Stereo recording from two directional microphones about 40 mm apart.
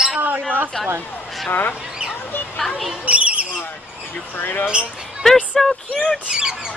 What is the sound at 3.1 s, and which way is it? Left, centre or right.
Speech, right.